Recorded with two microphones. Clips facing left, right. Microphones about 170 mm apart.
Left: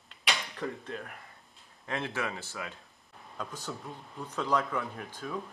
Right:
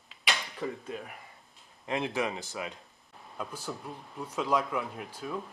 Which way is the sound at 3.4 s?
5° right (ahead or behind).